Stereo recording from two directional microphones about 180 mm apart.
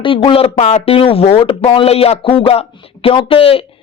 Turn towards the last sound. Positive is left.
turn(degrees=30)  # may be behind; listen again after turning